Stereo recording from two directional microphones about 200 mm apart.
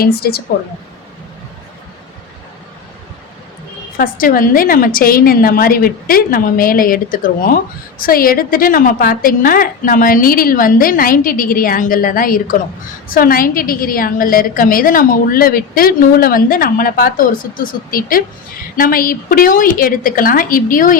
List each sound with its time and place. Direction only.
0.0 s a woman's voice: 50° left (ahead or behind)
3.9 s a woman's voice: 45° left (ahead or behind)